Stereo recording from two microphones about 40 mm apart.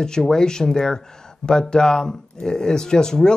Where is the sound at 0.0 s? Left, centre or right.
Centre.